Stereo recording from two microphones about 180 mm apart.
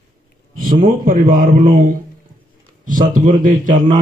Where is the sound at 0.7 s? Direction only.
50° right (ahead or behind).